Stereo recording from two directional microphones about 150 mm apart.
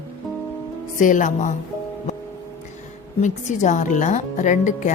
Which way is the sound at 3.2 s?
55° left (ahead or behind).